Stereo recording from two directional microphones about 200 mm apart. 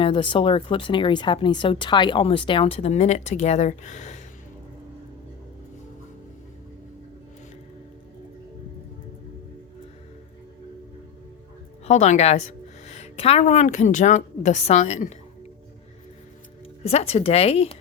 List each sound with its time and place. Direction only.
0.0 s speech: 25° left (ahead or behind)
11.9 s a woman's voice: 35° left (ahead or behind)
16.8 s speech: 30° left (ahead or behind)